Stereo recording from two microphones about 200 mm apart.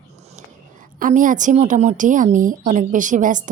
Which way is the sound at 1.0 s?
40° right (ahead or behind).